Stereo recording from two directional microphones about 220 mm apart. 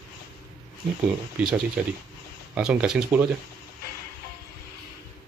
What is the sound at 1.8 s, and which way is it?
Speech, 5° right (ahead or behind).